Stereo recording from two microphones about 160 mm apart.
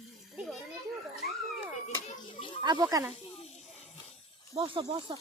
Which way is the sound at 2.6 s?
25° right (ahead or behind).